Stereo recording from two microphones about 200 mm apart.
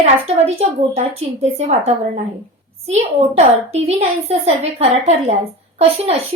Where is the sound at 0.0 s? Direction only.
30° right (ahead or behind).